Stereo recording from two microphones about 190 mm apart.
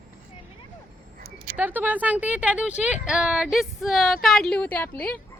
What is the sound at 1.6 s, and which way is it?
A woman's voice, 10° right (ahead or behind).